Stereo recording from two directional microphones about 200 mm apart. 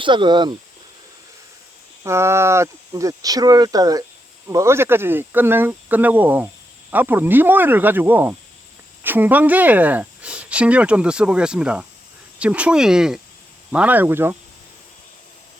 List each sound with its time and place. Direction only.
0.0 s speech: 25° right (ahead or behind)
2.0 s speech: 15° right (ahead or behind)